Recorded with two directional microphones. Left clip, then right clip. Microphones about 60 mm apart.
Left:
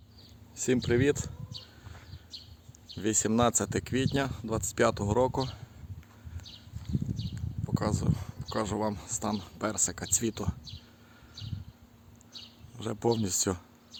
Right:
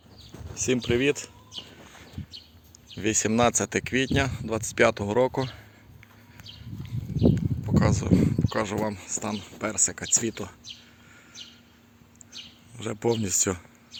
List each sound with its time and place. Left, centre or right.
0.5 s speech: centre
3.0 s speech: centre
7.3 s speech: centre
12.7 s speech: centre